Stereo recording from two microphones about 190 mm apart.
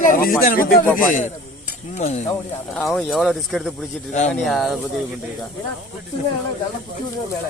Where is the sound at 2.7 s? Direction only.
Centre (ahead or behind).